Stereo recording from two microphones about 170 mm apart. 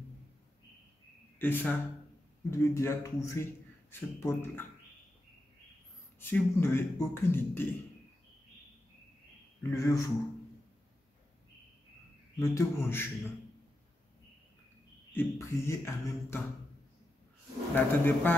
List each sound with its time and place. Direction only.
1.4 s a man's voice: 10° left (ahead or behind)
6.1 s a man's voice: 10° left (ahead or behind)
9.6 s a man's voice: 20° left (ahead or behind)
12.4 s a man's voice: 15° left (ahead or behind)
15.1 s a man's voice: 15° left (ahead or behind)
17.7 s a man's voice: 10° left (ahead or behind)